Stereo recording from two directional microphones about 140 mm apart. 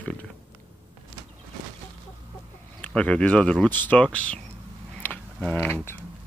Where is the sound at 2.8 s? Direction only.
10° left (ahead or behind).